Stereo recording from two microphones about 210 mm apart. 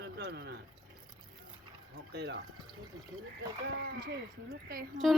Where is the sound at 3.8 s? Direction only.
50° right (ahead or behind).